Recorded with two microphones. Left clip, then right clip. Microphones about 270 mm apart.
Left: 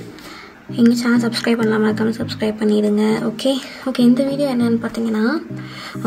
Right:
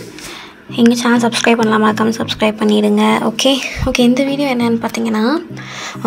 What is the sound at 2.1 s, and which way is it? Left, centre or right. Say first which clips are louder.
Speech: right 7 dB; right.